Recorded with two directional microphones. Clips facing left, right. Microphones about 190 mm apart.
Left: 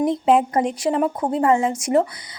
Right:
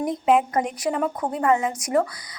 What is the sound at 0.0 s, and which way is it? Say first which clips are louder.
A woman's voice: left 3 dB; 30° left (ahead or behind).